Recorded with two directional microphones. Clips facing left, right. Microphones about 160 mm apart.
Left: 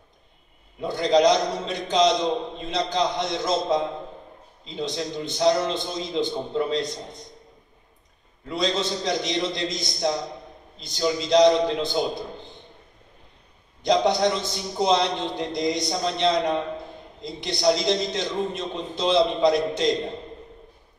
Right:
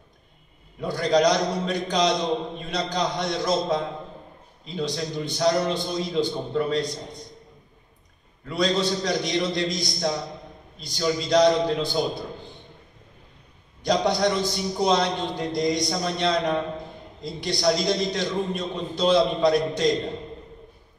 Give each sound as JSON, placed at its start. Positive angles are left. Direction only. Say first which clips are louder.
{"t": 0.7, "sound": "a man's voice", "louder": "left 1 dB", "side_deg": 20}
{"t": 8.5, "sound": "a man's voice", "louder": "right 2 dB", "side_deg": 20}
{"t": 13.8, "sound": "a man's voice", "louder": "left 2 dB", "side_deg": 20}